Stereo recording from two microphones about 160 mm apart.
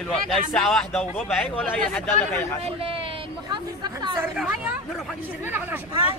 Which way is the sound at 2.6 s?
35° right (ahead or behind).